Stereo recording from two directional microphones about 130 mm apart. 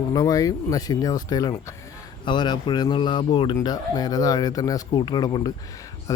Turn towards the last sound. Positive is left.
turn(degrees=35)  # may be behind; listen again after turning